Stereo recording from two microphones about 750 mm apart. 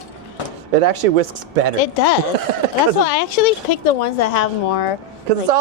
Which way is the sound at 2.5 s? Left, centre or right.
Right.